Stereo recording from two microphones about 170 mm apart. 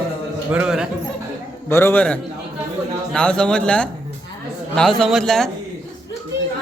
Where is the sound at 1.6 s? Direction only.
15° left (ahead or behind).